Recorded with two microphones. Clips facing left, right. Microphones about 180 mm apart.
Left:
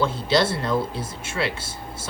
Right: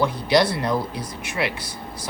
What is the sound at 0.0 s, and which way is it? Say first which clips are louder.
A woman's voice: right 2 dB; 15° right (ahead or behind).